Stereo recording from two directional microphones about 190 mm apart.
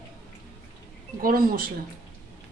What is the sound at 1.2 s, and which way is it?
Speech, 50° right (ahead or behind).